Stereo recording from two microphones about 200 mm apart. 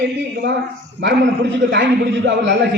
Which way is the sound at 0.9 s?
60° right (ahead or behind).